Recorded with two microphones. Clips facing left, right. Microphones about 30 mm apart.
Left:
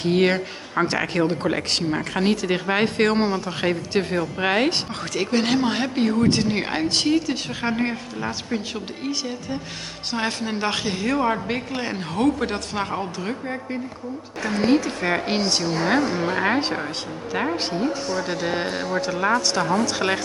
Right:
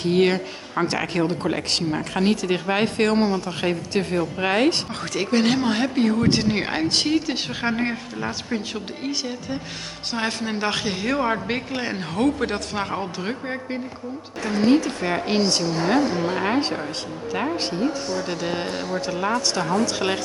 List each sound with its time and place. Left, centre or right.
0.0 s a woman's voice: centre
6.2 s speech: centre
13.2 s speech: centre
14.6 s a woman's voice: centre
15.8 s a woman's voice: centre